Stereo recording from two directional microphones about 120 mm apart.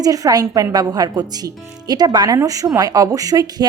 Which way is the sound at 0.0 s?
30° right (ahead or behind).